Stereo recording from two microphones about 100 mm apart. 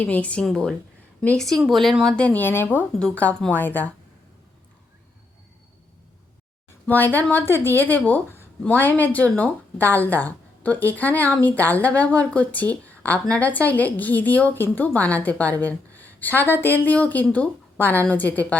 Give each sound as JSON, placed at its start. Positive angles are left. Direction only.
{"t": 0.0, "sound": "a woman's voice", "side_deg": 15}
{"t": 6.8, "sound": "a woman's voice", "side_deg": 20}